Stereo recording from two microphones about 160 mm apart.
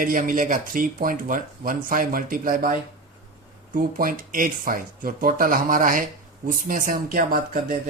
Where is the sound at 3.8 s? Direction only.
60° right (ahead or behind).